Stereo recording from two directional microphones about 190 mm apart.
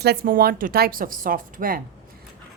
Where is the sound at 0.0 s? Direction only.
55° right (ahead or behind).